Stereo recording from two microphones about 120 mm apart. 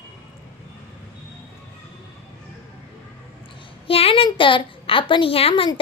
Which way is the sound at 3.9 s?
50° left (ahead or behind).